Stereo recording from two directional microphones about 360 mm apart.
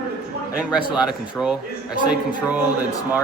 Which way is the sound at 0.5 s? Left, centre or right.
Centre.